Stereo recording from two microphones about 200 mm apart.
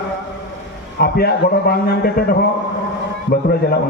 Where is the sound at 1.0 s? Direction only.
50° left (ahead or behind).